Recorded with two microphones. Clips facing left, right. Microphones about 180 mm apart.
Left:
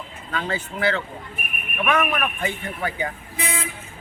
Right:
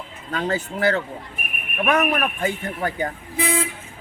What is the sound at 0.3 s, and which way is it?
Speech, 40° right (ahead or behind).